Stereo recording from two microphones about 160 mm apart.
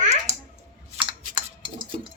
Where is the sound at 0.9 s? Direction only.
30° right (ahead or behind).